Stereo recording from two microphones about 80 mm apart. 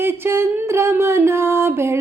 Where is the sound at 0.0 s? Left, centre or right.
Right.